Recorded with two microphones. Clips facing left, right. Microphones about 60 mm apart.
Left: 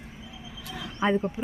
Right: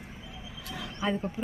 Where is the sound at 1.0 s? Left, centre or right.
Left.